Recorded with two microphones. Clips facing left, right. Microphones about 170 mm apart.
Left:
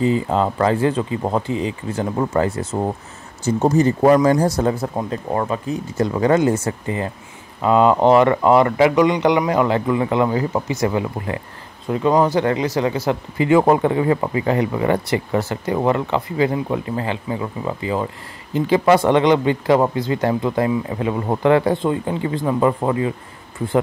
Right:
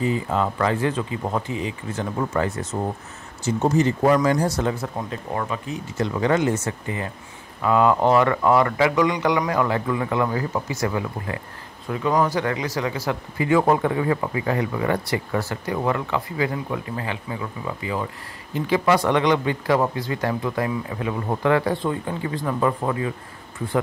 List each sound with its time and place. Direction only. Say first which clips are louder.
0.0 s speech: left 5 dB; 30° left (ahead or behind)